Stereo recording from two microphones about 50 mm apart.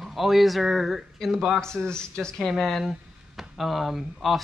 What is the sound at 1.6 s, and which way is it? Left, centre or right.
Speech, centre.